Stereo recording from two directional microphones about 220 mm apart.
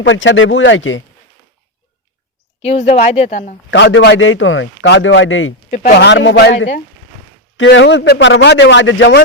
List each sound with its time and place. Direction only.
0.0 s a man's voice: 60° left (ahead or behind)
2.6 s speech: 30° left (ahead or behind)
3.7 s a man's voice: 55° left (ahead or behind)